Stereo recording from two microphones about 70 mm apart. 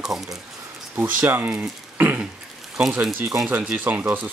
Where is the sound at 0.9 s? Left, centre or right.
Right.